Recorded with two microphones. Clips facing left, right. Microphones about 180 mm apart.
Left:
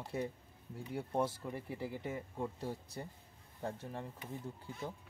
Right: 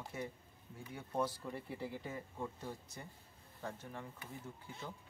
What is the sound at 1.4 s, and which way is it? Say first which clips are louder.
Speech: left 2 dB; 10° left (ahead or behind).